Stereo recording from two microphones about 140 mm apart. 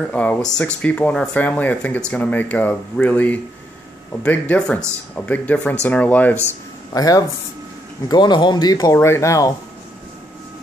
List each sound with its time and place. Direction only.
0.1 s speech: 10° left (ahead or behind)
6.9 s speech: 25° left (ahead or behind)